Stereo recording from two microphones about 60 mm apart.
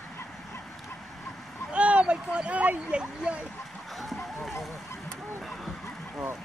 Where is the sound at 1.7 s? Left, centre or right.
Centre.